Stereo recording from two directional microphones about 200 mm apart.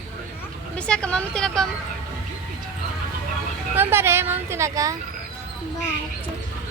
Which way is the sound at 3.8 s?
10° right (ahead or behind).